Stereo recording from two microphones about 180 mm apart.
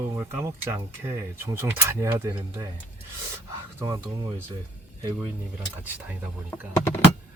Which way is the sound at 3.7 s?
20° right (ahead or behind).